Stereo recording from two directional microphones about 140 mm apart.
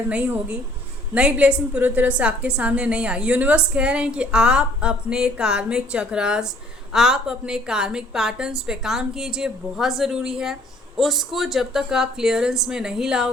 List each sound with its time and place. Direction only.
0.1 s a woman's voice: 10° right (ahead or behind)